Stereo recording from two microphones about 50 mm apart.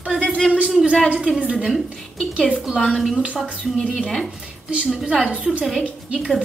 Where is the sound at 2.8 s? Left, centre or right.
Centre.